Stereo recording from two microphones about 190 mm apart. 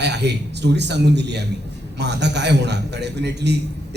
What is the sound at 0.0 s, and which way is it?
A man's voice, 65° right (ahead or behind).